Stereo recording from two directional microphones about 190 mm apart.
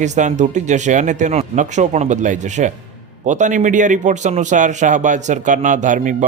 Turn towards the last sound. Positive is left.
turn(degrees=-45)  # may be behind; listen again after turning